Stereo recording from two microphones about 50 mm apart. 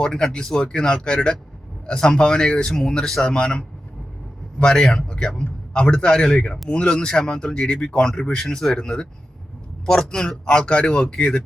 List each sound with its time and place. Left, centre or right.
0.0 s a man's voice: centre
4.6 s a man's voice: centre